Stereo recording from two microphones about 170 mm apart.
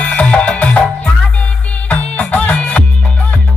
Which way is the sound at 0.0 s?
10° left (ahead or behind).